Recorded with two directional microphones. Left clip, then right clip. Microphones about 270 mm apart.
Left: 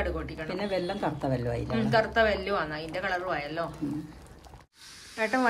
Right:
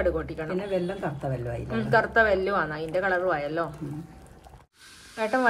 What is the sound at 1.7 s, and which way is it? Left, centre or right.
A woman's voice, centre.